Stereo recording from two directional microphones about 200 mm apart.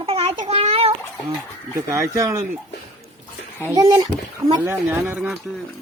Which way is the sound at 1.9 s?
15° right (ahead or behind).